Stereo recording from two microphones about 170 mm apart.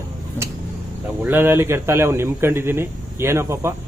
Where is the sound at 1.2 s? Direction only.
10° right (ahead or behind).